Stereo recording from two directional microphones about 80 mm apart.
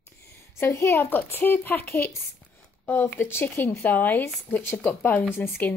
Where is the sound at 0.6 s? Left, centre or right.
Left.